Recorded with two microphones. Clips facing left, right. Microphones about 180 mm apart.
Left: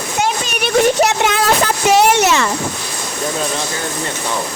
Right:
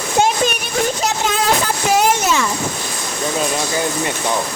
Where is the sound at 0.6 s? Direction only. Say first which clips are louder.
Left 7 dB; 70° left (ahead or behind).